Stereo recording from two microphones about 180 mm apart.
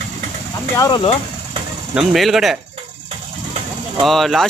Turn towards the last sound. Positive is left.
turn(degrees=0)  # may be behind; listen again after turning